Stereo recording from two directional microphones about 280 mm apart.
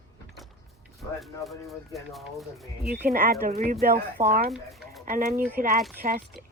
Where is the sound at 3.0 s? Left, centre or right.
Right.